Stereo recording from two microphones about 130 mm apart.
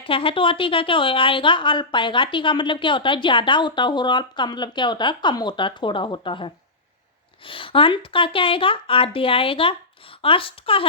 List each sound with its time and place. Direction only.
0.0 s a woman's voice: 45° left (ahead or behind)